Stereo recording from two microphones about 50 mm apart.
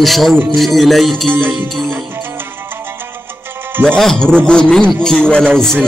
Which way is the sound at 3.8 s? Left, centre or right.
Centre.